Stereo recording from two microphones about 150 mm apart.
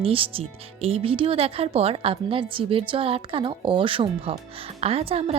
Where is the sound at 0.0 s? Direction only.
40° right (ahead or behind).